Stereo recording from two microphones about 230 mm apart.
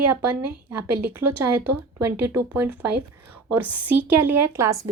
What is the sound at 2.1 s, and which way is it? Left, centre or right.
Speech, right.